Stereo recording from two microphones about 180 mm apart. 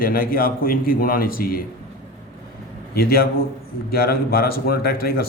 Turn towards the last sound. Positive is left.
turn(degrees=55)  # may be behind; listen again after turning